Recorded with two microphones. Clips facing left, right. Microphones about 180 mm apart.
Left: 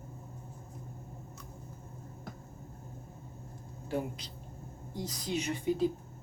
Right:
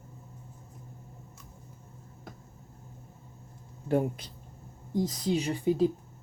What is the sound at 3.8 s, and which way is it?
Speech, 50° right (ahead or behind).